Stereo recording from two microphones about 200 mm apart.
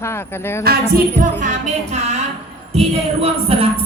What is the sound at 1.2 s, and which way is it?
Music, 40° right (ahead or behind).